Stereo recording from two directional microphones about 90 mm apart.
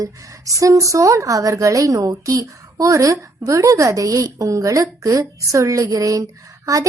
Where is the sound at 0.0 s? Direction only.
40° right (ahead or behind).